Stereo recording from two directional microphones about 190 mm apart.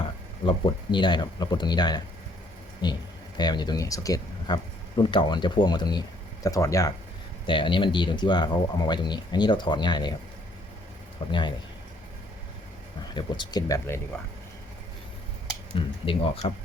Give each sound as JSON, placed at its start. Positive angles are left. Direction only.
{"t": 0.0, "sound": "speech", "side_deg": 25}
{"t": 11.3, "sound": "speech", "side_deg": 25}
{"t": 13.1, "sound": "speech", "side_deg": 25}
{"t": 15.7, "sound": "speech", "side_deg": 30}